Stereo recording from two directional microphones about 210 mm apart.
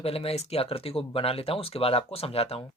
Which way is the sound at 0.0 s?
30° left (ahead or behind).